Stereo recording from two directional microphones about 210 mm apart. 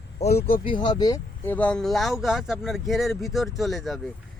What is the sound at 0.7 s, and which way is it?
Speech, 20° left (ahead or behind).